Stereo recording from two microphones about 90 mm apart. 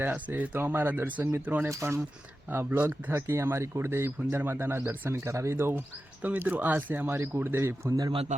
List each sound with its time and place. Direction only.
0.0 s speech: 20° right (ahead or behind)